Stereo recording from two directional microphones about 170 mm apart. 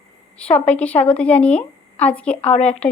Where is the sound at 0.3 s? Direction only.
5° left (ahead or behind).